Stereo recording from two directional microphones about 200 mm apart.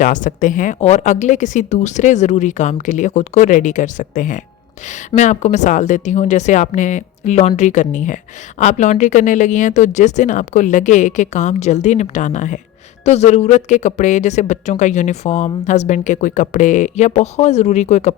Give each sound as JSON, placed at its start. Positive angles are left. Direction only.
{"t": 0.0, "sound": "speech", "side_deg": 40}